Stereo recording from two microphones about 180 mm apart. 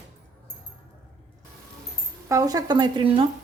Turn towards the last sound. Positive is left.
turn(degrees=-25)  # may be behind; listen again after turning